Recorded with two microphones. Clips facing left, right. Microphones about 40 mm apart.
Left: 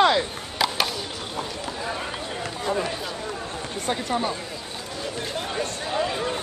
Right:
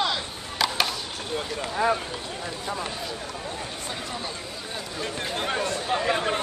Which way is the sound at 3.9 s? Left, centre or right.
Left.